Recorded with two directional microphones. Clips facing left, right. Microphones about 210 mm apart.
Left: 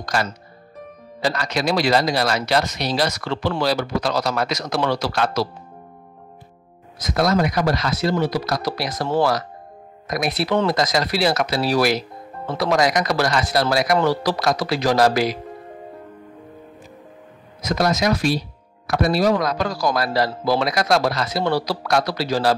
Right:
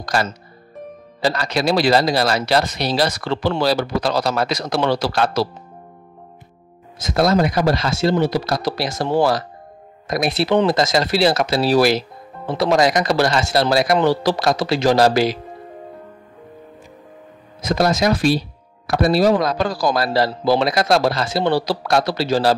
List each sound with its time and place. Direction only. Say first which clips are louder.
0.0 s speech: right 2 dB; 35° right (ahead or behind)
7.0 s a man's voice: right 3 dB; 30° right (ahead or behind)
17.6 s a man's voice: right 3 dB; 30° right (ahead or behind)